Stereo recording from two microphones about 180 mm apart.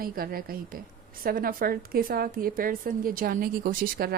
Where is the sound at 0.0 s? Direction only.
55° right (ahead or behind).